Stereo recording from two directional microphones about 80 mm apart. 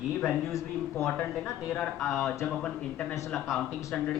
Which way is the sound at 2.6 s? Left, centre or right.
Centre.